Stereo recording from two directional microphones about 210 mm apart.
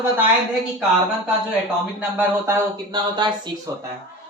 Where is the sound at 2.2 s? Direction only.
15° right (ahead or behind).